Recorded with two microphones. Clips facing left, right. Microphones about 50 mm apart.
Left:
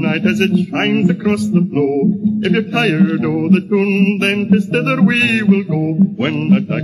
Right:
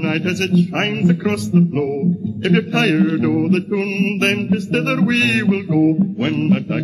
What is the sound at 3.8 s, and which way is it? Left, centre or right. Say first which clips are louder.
Mantra: left 6 dB; centre.